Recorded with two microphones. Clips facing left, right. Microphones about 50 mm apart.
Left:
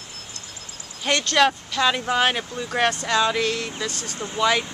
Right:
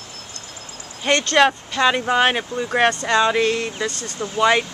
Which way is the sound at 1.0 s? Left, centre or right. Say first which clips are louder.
Right 3 dB; centre.